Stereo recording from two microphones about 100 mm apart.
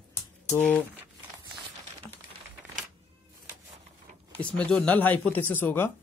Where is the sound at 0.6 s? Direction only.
15° left (ahead or behind).